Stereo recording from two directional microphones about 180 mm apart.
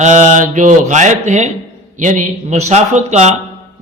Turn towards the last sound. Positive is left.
turn(degrees=-40)  # may be behind; listen again after turning